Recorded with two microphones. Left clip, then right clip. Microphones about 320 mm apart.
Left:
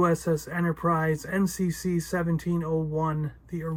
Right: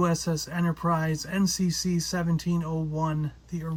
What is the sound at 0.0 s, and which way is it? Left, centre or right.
Speech, centre.